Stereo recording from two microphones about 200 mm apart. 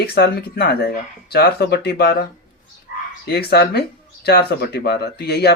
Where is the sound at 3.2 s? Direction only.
55° left (ahead or behind).